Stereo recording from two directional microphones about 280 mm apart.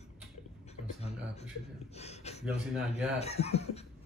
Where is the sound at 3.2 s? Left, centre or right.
Left.